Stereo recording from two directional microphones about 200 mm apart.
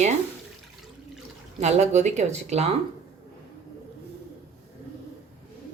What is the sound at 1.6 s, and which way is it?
Speech, 35° right (ahead or behind).